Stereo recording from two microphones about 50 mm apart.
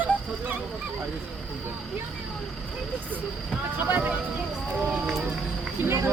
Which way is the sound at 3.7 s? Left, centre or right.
Right.